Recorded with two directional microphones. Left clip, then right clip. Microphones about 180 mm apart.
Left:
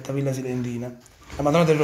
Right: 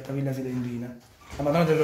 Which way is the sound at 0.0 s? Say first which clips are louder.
Left 5 dB; 30° left (ahead or behind).